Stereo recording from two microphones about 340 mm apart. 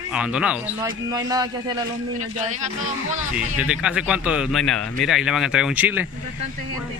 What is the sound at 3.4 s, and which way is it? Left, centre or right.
Speech, centre.